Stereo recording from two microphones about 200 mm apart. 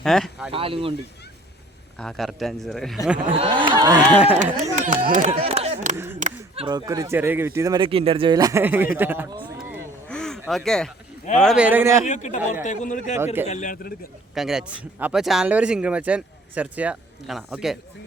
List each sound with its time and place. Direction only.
0.0 s speech: centre (ahead or behind)
0.5 s speech: 25° right (ahead or behind)
2.0 s speech: centre (ahead or behind)
3.3 s speech: 25° right (ahead or behind)
4.5 s speech: 35° right (ahead or behind)
6.1 s a sound: 35° right (ahead or behind)
6.7 s speech: 20° right (ahead or behind)
10.1 s a sound: 5° left (ahead or behind)
11.3 s speech: centre (ahead or behind)
12.0 s a man's voice: 35° left (ahead or behind)
13.1 s speech: 10° right (ahead or behind)
13.5 s a man's voice: 40° left (ahead or behind)
14.3 s speech: 5° right (ahead or behind)